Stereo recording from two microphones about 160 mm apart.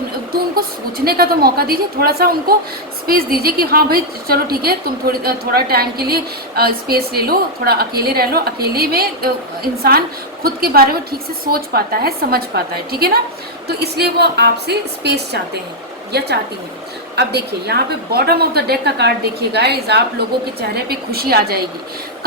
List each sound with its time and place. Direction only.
0.3 s a woman's voice: 70° right (ahead or behind)
13.7 s a woman's voice: 90° right